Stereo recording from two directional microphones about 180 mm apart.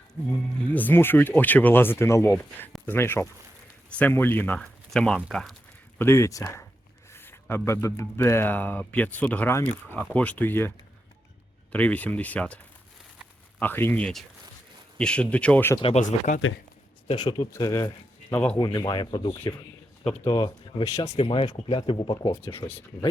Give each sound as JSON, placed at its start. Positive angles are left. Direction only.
{"t": 0.7, "sound": "speech", "side_deg": 10}
{"t": 6.0, "sound": "speech", "side_deg": 15}
{"t": 11.7, "sound": "speech", "side_deg": 5}
{"t": 13.6, "sound": "speech", "side_deg": 10}
{"t": 16.0, "sound": "speech", "side_deg": 45}
{"t": 17.2, "sound": "speech", "side_deg": 20}
{"t": 18.3, "sound": "speech", "side_deg": 5}
{"t": 18.6, "sound": "speech", "side_deg": 20}
{"t": 21.2, "sound": "speech", "side_deg": 30}